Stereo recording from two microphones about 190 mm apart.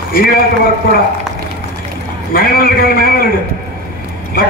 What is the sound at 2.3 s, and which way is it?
A man's voice, 50° left (ahead or behind).